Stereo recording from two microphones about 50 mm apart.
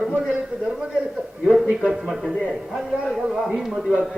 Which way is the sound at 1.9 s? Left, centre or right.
Centre.